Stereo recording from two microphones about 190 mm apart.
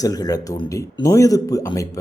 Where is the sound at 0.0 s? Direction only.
20° left (ahead or behind).